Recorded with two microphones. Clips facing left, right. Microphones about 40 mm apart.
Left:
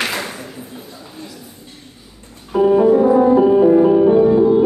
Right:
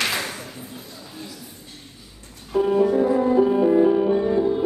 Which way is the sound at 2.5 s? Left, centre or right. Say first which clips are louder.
Left 6 dB; left.